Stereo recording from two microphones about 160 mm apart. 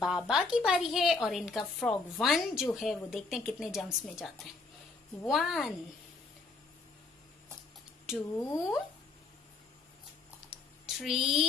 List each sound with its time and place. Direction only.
0.0 s a woman's voice: 5° right (ahead or behind)
5.3 s a woman's voice: centre (ahead or behind)
8.4 s speech: 20° left (ahead or behind)
10.9 s speech: centre (ahead or behind)